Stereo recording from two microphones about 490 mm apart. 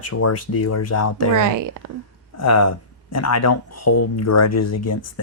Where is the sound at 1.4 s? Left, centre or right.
Right.